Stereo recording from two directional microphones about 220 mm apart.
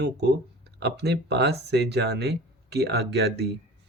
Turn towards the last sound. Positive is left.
turn(degrees=-50)  # may be behind; listen again after turning